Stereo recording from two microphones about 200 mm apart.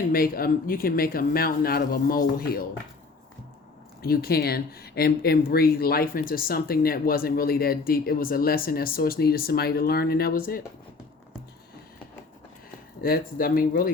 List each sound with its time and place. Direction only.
0.1 s speech: 45° left (ahead or behind)
4.0 s speech: 50° left (ahead or behind)
13.0 s speech: 45° left (ahead or behind)